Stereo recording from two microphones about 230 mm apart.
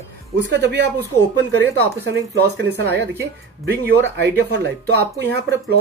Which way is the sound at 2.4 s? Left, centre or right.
Right.